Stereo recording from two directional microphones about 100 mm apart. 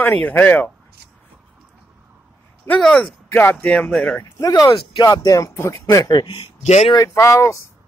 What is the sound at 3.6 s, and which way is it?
Speech, 5° left (ahead or behind).